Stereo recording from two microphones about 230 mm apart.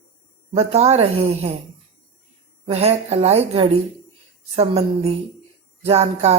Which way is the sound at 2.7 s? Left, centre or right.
Right.